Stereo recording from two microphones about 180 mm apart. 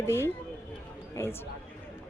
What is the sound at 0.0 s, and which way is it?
Speech, 15° left (ahead or behind).